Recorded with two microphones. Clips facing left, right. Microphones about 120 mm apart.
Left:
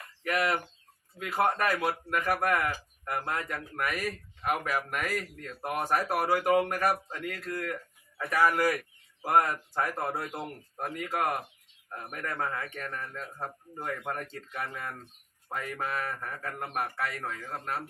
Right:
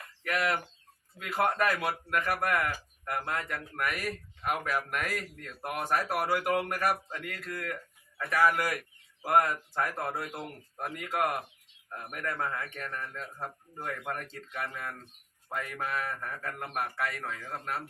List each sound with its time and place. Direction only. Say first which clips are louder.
0.3 s speech: left 2 dB; 5° left (ahead or behind)
1.7 s speech: left 1 dB; centre (ahead or behind)
7.3 s speech: left 3 dB; 10° left (ahead or behind)